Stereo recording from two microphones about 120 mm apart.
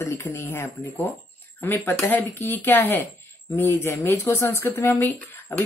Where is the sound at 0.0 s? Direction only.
25° left (ahead or behind).